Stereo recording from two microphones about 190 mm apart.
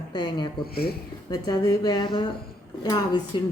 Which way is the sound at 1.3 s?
20° left (ahead or behind).